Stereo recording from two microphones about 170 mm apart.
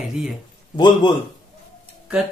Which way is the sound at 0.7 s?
25° left (ahead or behind).